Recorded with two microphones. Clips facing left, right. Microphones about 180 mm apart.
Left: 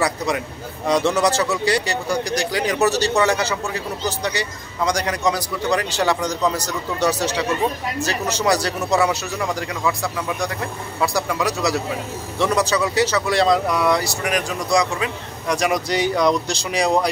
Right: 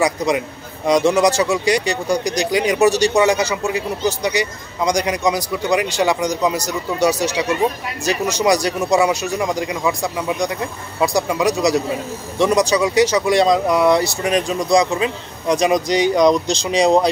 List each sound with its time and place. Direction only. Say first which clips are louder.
0.0 s speech: right 4 dB; 15° right (ahead or behind)